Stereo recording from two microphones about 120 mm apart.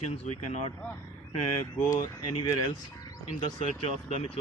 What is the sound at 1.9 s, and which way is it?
Speech, 35° left (ahead or behind).